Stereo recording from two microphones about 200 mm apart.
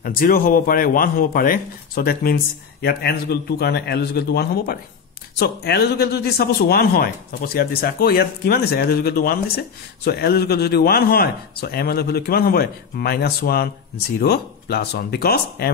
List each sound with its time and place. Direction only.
0.0 s speech: 45° left (ahead or behind)